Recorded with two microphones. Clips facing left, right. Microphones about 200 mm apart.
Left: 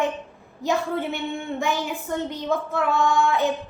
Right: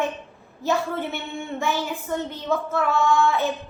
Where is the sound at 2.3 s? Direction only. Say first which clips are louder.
Even; 15° left (ahead or behind).